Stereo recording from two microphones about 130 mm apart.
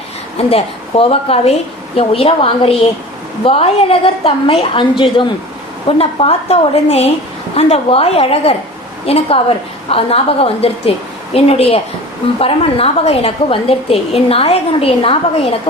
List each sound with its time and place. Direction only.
0.3 s a woman's voice: 45° left (ahead or behind)